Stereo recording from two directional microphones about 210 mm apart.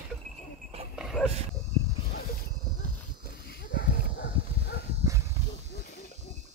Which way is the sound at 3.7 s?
55° left (ahead or behind).